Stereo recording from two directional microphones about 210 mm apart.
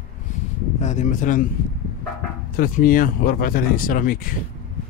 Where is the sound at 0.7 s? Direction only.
35° left (ahead or behind).